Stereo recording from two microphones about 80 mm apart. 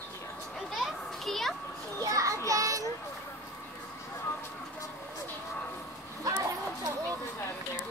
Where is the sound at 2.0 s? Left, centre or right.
Right.